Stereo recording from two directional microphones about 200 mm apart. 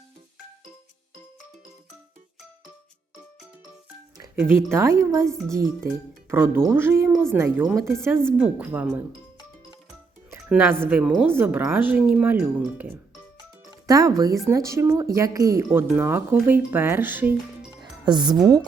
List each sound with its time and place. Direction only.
4.4 s speech: 10° right (ahead or behind)
10.3 s speech: 10° right (ahead or behind)
18.0 s speech: 20° right (ahead or behind)